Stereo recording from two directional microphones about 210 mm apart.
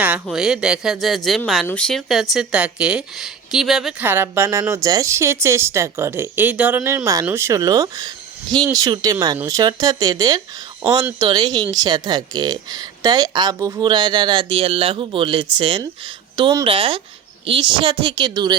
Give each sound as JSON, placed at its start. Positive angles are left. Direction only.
{"t": 0.0, "sound": "speech", "side_deg": -5}